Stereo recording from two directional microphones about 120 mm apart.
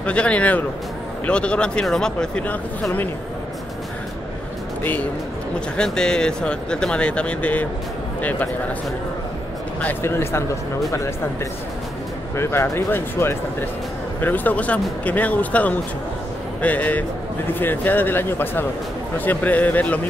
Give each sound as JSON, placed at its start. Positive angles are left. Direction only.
{"t": 0.0, "sound": "speech", "side_deg": 10}
{"t": 5.8, "sound": "a man's voice", "side_deg": 5}
{"t": 9.8, "sound": "speech", "side_deg": 15}
{"t": 12.4, "sound": "speech", "side_deg": 20}